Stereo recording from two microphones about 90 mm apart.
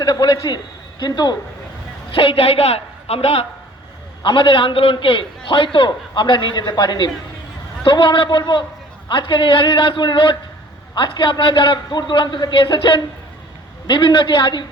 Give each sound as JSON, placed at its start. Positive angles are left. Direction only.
{"t": 0.0, "sound": "a man's voice", "side_deg": 50}
{"t": 2.1, "sound": "a man's voice", "side_deg": 85}
{"t": 4.2, "sound": "a man's voice", "side_deg": 65}
{"t": 7.9, "sound": "a man's voice", "side_deg": 65}